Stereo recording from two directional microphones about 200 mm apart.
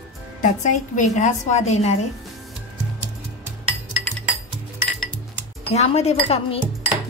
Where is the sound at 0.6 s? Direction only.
35° left (ahead or behind).